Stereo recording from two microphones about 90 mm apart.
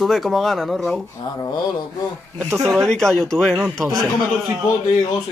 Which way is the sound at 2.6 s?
5° left (ahead or behind).